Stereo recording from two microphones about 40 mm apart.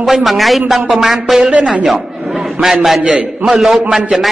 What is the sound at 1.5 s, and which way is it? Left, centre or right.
Speech, right.